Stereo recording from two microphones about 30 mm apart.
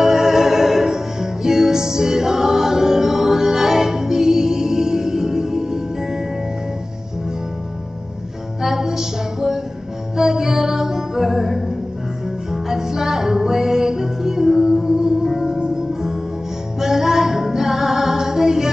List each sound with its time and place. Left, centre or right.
0.0 s music: centre
8.5 s music: centre